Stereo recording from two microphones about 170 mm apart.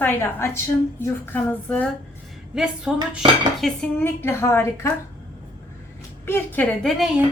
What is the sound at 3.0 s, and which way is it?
Cutlery, 30° right (ahead or behind).